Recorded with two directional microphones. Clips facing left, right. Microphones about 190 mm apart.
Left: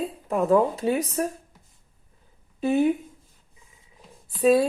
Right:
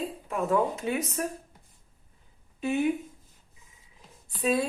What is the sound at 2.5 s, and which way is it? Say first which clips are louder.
Speech: left 5 dB; 35° left (ahead or behind).